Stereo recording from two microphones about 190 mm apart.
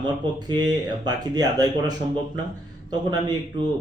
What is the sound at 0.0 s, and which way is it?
Speech, 20° right (ahead or behind).